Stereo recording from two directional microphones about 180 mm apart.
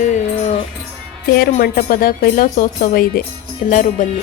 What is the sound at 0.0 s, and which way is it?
Music, 40° left (ahead or behind).